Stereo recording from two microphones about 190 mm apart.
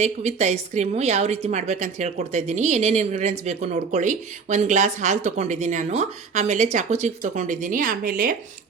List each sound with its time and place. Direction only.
0.0 s a woman's voice: 35° right (ahead or behind)